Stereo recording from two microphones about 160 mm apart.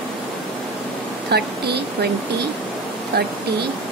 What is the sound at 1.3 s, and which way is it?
Speech, 90° right.